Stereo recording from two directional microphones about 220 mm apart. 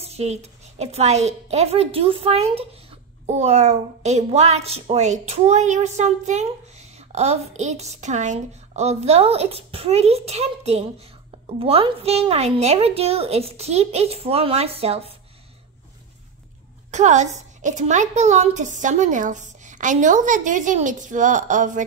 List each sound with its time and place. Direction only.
0.0 s a woman's voice: 30° right (ahead or behind)
16.9 s a woman's voice: 30° right (ahead or behind)